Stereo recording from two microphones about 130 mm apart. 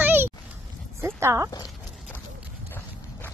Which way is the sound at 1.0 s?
25° right (ahead or behind).